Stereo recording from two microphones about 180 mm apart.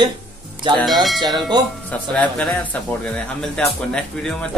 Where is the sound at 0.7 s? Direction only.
Centre (ahead or behind).